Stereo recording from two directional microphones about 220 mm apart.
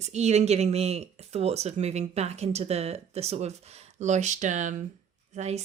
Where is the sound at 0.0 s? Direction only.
30° right (ahead or behind).